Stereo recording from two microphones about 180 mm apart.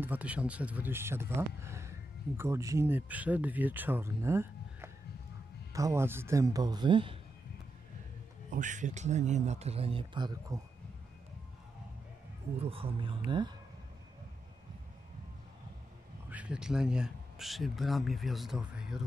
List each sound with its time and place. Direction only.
0.0 s speech: 10° right (ahead or behind); by 7.2 s 25° right (ahead or behind)
8.5 s speech: 45° right (ahead or behind); by 10.6 s 25° right (ahead or behind)
12.5 s speech: 30° right (ahead or behind)
16.3 s speech: 5° right (ahead or behind)